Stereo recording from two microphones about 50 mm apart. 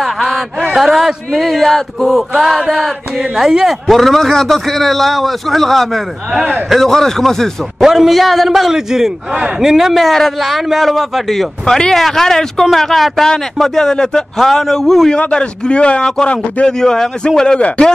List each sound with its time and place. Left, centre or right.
0.0 s a sound: centre
0.7 s a man's voice: centre
3.8 s speech: centre
7.8 s a man's voice: centre
15.1 s a man's voice: centre
16.8 s speech: centre
17.6 s a man's voice: left